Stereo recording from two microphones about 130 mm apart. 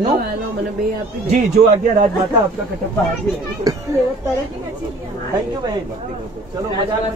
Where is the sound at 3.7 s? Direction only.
30° right (ahead or behind).